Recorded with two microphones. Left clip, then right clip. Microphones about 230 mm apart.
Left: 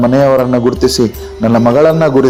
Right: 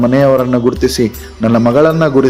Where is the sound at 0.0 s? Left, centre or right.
Centre.